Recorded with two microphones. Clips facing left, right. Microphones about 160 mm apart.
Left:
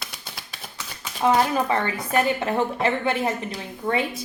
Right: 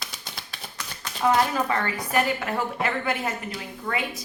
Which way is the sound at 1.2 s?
20° left (ahead or behind).